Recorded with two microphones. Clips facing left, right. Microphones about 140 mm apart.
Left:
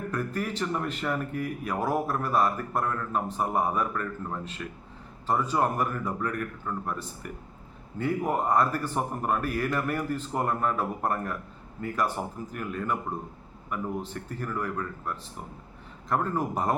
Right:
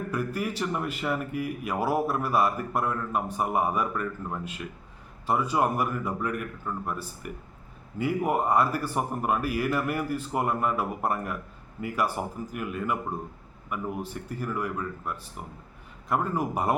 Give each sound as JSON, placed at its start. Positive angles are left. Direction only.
{"t": 0.1, "sound": "speech", "side_deg": -10}